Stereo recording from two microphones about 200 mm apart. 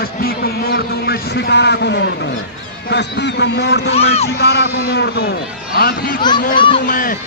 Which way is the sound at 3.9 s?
30° left (ahead or behind).